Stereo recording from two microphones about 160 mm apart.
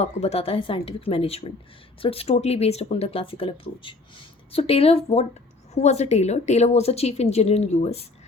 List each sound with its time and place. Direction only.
0.0 s speech: 40° left (ahead or behind)